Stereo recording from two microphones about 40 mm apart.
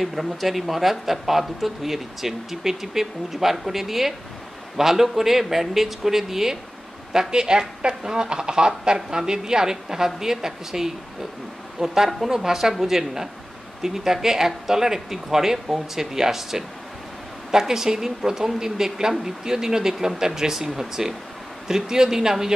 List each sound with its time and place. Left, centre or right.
0.0 s speech: centre